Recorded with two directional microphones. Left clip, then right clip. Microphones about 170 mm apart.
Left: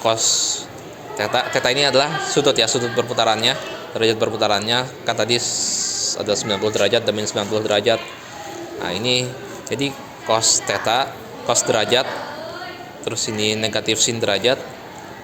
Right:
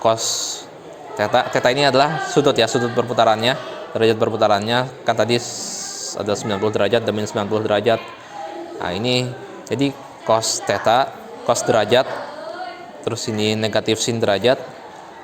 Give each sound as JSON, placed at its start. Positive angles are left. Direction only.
{"t": 0.0, "sound": "a man's voice", "side_deg": -50}
{"t": 13.1, "sound": "speech", "side_deg": -50}